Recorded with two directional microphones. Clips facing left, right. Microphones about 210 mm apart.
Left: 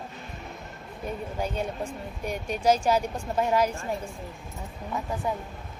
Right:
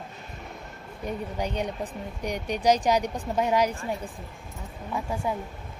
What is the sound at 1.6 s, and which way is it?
Speech, 15° right (ahead or behind).